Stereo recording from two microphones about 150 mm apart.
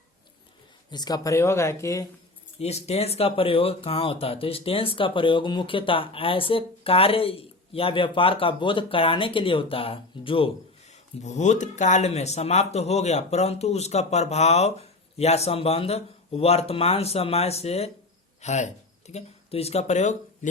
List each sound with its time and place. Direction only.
0.9 s speech: 25° left (ahead or behind)
2.6 s speech: 45° left (ahead or behind)
11.2 s speech: 50° left (ahead or behind)